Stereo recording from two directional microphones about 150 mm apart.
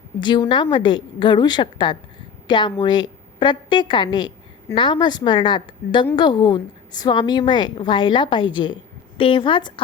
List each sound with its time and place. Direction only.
0.2 s a woman's voice: 30° left (ahead or behind)